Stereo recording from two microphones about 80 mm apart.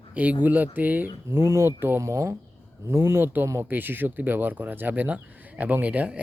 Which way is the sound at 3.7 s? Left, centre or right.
Right.